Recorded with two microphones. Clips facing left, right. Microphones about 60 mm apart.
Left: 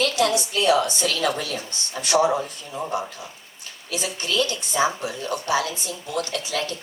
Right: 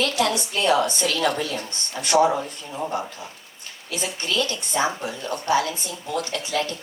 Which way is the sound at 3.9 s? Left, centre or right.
Right.